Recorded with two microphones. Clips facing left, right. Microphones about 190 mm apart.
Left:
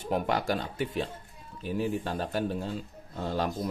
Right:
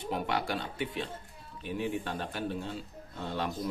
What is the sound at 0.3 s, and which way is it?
A man's voice, 45° left (ahead or behind).